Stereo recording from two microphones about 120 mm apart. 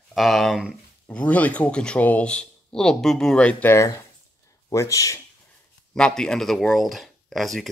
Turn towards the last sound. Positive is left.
turn(degrees=0)  # may be behind; listen again after turning